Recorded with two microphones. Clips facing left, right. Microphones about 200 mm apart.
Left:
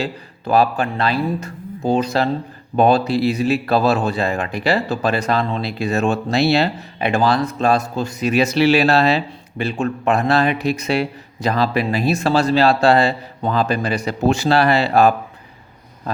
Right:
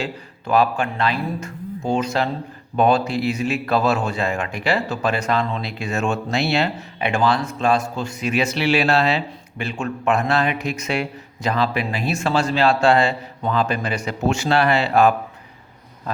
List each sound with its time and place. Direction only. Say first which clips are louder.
0.0 s speech: left 3 dB; 35° left (ahead or behind)